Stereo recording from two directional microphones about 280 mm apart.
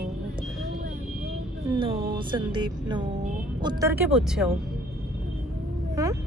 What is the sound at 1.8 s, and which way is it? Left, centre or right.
Music, centre.